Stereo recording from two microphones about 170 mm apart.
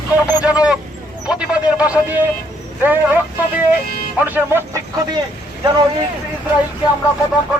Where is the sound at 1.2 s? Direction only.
5° right (ahead or behind).